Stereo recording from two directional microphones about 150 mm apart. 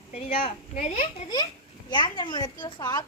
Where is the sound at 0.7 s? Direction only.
55° left (ahead or behind).